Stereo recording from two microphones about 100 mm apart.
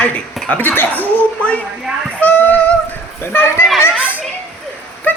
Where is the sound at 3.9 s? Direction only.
15° right (ahead or behind).